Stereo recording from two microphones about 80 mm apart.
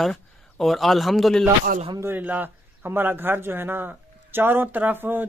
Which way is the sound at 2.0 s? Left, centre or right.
Right.